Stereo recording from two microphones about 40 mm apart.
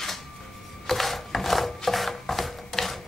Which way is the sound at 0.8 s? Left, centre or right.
Centre.